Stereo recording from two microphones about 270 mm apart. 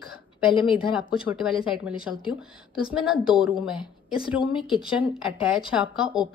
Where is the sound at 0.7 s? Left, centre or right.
Centre.